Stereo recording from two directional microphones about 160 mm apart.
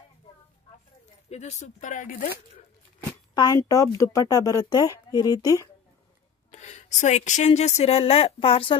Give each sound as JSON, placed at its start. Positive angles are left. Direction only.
{"t": 1.3, "sound": "speech", "side_deg": 45}
{"t": 3.3, "sound": "speech", "side_deg": 20}
{"t": 6.5, "sound": "speech", "side_deg": 45}